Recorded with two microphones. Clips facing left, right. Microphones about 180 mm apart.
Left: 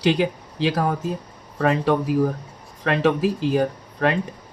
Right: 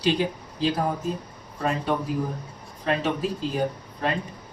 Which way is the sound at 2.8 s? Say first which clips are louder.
Left 6 dB; 75° left (ahead or behind).